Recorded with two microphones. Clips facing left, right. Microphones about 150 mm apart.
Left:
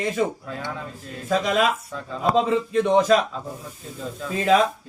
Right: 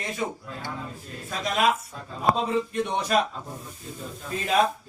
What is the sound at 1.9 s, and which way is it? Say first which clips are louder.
A man's voice: left 2 dB; 90° left.